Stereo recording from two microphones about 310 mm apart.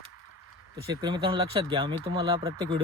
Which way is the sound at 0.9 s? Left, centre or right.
Centre.